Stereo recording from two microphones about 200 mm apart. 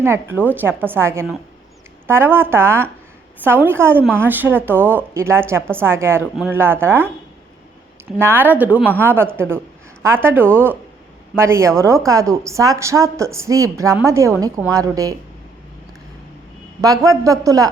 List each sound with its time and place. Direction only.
0.0 s a woman's voice: 10° right (ahead or behind)
6.3 s speech: centre (ahead or behind)
6.6 s a woman's voice: 10° right (ahead or behind)
8.2 s a woman's voice: 10° right (ahead or behind)
16.8 s a woman's voice: 15° right (ahead or behind)